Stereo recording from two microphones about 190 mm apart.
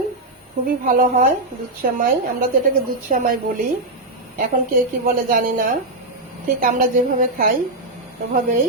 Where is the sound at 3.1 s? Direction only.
45° right (ahead or behind).